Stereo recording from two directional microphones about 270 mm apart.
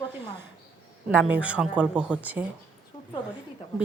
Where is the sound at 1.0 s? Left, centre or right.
Centre.